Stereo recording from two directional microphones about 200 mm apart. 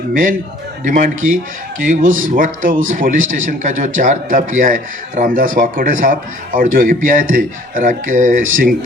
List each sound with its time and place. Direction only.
0.1 s a man's voice: 40° right (ahead or behind)